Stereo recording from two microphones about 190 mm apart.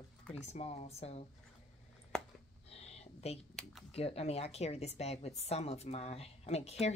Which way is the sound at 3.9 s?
30° left (ahead or behind).